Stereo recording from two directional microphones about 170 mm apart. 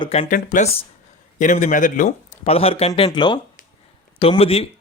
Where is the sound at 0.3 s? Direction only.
50° left (ahead or behind).